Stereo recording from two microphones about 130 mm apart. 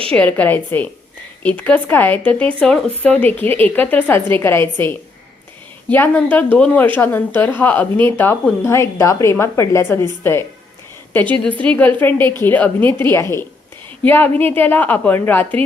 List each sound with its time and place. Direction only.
0.1 s speech: 10° left (ahead or behind)
6.3 s speech: 15° left (ahead or behind)
7.9 s speech: 40° right (ahead or behind)
8.6 s a woman's voice: 20° left (ahead or behind)